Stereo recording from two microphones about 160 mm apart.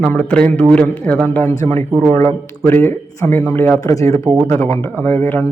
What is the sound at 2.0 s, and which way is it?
Speech, 40° right (ahead or behind).